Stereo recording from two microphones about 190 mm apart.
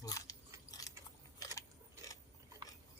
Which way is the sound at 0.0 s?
20° left (ahead or behind).